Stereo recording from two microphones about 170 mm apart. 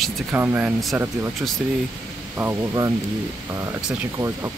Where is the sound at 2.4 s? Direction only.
15° right (ahead or behind).